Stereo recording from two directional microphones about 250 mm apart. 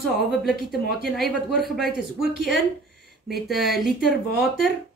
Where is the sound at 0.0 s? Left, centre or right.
Centre.